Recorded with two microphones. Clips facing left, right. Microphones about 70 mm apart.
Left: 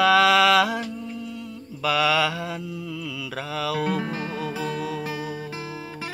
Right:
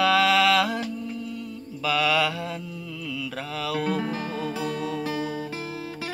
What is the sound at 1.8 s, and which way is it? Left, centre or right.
Music, left.